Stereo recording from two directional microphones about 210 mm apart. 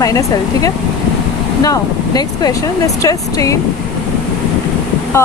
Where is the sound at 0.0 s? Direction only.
15° left (ahead or behind).